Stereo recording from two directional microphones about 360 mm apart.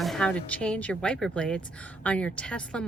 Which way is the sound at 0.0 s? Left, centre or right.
Centre.